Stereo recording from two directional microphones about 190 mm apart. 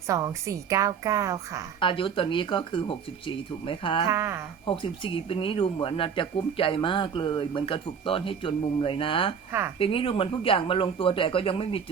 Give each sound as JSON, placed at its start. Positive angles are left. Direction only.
{"t": 0.1, "sound": "a woman's voice", "side_deg": -15}
{"t": 1.8, "sound": "speech", "side_deg": 25}
{"t": 4.1, "sound": "a woman's voice", "side_deg": -15}
{"t": 4.6, "sound": "speech", "side_deg": 30}
{"t": 9.5, "sound": "a woman's voice", "side_deg": -10}
{"t": 9.7, "sound": "speech", "side_deg": 30}